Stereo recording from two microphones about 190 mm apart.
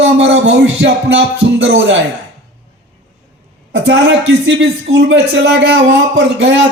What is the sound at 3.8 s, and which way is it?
Speech, 75° right (ahead or behind).